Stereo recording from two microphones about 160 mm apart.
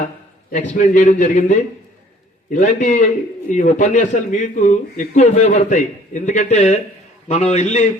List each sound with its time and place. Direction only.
0.5 s a man's voice: 50° left (ahead or behind)